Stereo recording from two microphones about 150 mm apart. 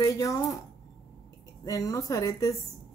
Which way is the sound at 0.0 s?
25° left (ahead or behind).